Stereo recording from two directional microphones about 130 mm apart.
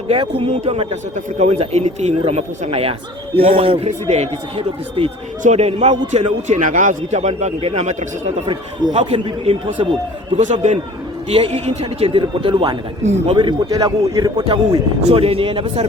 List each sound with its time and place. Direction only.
0.1 s a man's voice: 50° right (ahead or behind)
3.8 s a man's voice: 60° right (ahead or behind)
5.4 s a man's voice: 60° right (ahead or behind)
6.5 s a man's voice: 80° right; by 9.8 s 50° right (ahead or behind)
10.3 s a man's voice: 65° right (ahead or behind)
11.3 s a man's voice: 50° right (ahead or behind)
12.2 s a man's voice: 40° right (ahead or behind)
13.0 s a man's voice: 60° right (ahead or behind)
13.3 s a man's voice: 35° right (ahead or behind)
14.4 s a man's voice: 40° right (ahead or behind)